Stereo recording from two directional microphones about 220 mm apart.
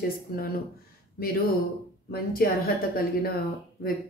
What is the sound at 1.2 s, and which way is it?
Speech, 40° left (ahead or behind).